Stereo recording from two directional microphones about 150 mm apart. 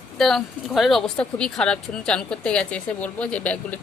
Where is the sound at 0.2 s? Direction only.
Centre (ahead or behind).